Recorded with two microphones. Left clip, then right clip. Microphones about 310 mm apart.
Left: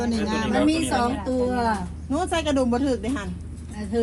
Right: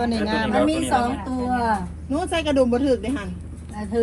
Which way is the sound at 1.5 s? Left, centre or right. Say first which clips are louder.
Right 5 dB; centre.